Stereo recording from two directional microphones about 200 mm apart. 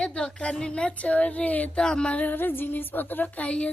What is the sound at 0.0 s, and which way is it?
A woman's voice, 5° left (ahead or behind).